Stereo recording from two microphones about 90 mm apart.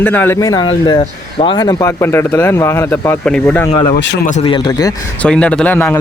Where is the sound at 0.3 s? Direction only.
40° left (ahead or behind).